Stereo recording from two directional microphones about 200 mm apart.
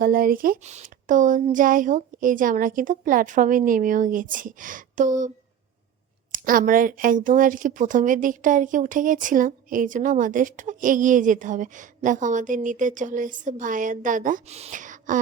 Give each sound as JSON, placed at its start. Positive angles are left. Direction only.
{"t": 0.0, "sound": "speech", "side_deg": -45}
{"t": 6.3, "sound": "speech", "side_deg": -45}